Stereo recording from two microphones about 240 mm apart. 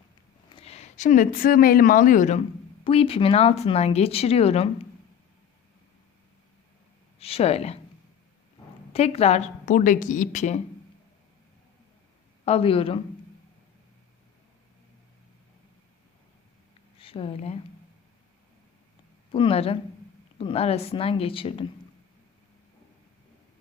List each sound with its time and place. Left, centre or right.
0.5 s speech: left
7.2 s speech: left
8.9 s speech: left
12.5 s speech: left
17.0 s speech: left
19.3 s speech: left